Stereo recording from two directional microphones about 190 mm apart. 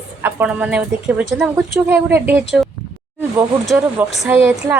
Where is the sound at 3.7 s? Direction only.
5° right (ahead or behind).